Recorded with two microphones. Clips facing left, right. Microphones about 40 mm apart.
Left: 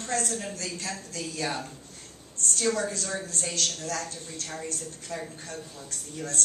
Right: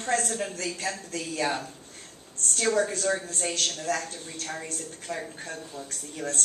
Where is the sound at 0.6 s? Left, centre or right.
Right.